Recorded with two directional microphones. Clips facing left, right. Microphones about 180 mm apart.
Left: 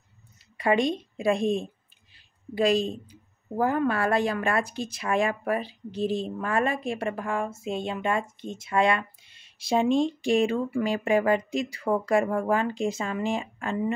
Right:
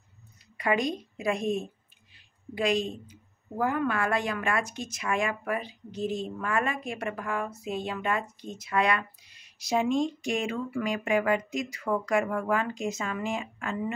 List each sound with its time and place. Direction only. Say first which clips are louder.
0.6 s a woman's voice: left 4 dB; 30° left (ahead or behind)